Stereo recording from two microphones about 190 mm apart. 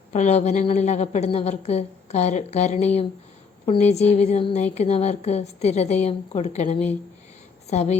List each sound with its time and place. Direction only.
0.1 s a woman's voice: 35° left (ahead or behind)